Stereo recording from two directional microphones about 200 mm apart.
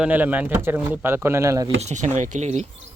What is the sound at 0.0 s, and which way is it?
Speech, 10° right (ahead or behind).